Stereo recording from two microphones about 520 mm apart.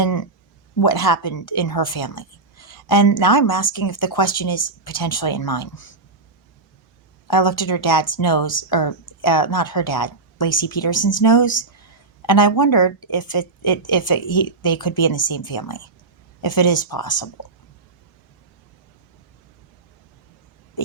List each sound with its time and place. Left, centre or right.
0.0 s a sound: left
0.8 s a woman's voice: left
7.3 s a woman's voice: left